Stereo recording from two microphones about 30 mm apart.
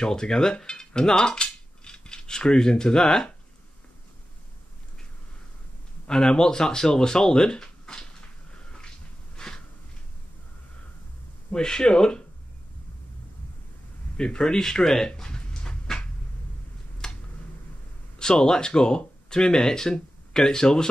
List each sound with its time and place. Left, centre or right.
0.0 s speech: left
0.7 s cutlery: left
6.0 s speech: left
9.4 s a sound: left
11.5 s speech: left
14.1 s speech: left
15.2 s a sound: left
17.0 s a sound: left
18.2 s speech: left